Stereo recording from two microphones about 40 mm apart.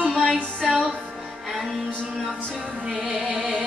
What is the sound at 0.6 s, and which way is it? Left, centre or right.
Music, centre.